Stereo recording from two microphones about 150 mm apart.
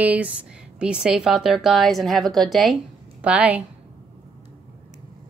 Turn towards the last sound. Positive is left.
turn(degrees=-10)  # may be behind; listen again after turning